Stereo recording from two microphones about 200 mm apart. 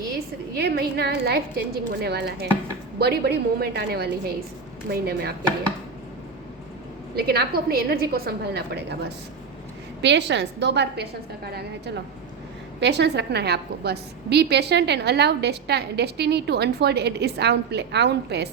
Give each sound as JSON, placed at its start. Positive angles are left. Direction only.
{"t": 0.5, "sound": "a woman's voice", "side_deg": -55}
{"t": 7.2, "sound": "a woman's voice", "side_deg": -50}